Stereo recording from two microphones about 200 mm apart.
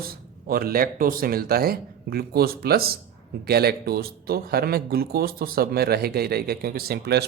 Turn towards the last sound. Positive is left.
turn(degrees=-55)  # may be behind; listen again after turning